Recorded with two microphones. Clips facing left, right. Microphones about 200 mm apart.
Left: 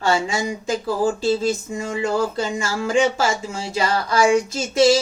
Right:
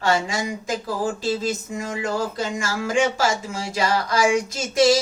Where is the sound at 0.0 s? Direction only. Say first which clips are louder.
Left 2 dB; 25° left (ahead or behind).